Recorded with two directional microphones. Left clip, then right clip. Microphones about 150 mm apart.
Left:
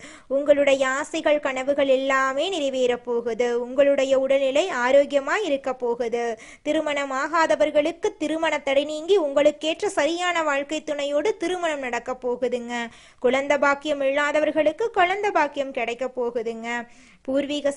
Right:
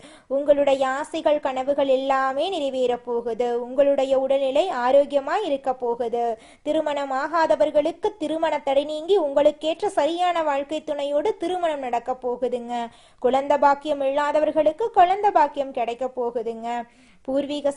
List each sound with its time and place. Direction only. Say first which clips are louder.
0.3 s a woman's voice: even; 10° left (ahead or behind)